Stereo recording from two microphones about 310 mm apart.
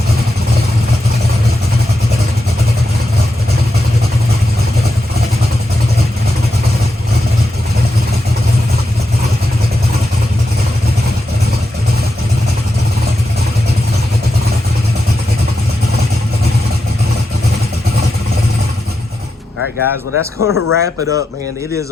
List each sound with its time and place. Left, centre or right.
19.8 s speech: left